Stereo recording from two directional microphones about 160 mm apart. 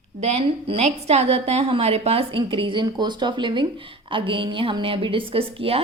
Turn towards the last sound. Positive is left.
turn(degrees=-35)  # may be behind; listen again after turning